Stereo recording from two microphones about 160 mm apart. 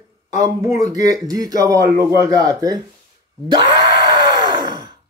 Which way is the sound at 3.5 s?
30° right (ahead or behind).